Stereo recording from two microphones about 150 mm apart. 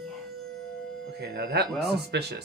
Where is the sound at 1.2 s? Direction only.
90° right.